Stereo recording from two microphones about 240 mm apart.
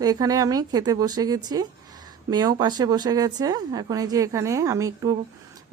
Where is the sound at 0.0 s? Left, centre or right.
Centre.